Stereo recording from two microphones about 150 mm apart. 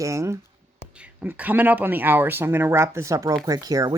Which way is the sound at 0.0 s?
20° right (ahead or behind).